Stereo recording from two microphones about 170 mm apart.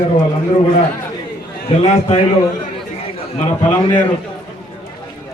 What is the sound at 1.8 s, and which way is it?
Speech, 35° left (ahead or behind).